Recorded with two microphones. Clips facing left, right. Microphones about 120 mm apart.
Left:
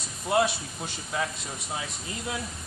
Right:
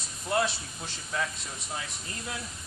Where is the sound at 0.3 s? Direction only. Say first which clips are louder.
Left 4 dB; 15° left (ahead or behind).